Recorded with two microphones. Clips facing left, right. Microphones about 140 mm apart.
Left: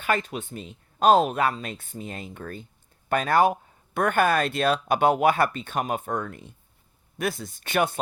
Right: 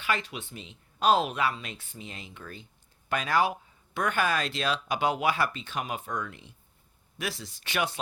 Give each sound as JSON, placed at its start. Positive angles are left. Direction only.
{"t": 0.0, "sound": "speech", "side_deg": 45}